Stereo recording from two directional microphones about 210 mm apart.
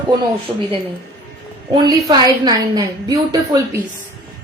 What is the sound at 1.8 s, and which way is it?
A woman's voice, 20° right (ahead or behind).